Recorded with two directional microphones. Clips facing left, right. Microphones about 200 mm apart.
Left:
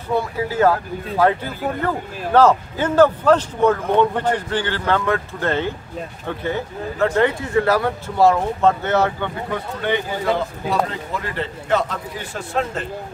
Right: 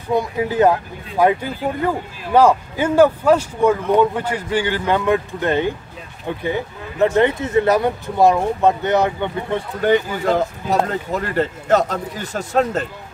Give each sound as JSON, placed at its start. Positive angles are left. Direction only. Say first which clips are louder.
{"t": 0.1, "sound": "speech", "louder": "right 2 dB", "side_deg": -15}
{"t": 9.8, "sound": "a man's voice", "louder": "right 6 dB", "side_deg": -40}